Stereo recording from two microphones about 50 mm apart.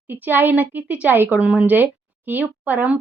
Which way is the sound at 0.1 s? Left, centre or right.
Right.